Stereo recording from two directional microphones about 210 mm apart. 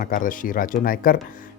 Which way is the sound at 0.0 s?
40° left (ahead or behind).